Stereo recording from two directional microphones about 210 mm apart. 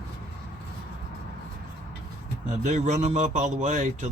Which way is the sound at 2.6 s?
35° right (ahead or behind).